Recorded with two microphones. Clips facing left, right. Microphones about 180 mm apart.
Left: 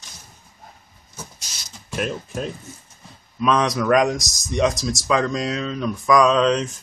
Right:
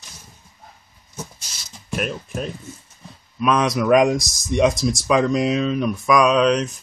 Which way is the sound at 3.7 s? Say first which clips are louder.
Right 2 dB; 20° right (ahead or behind).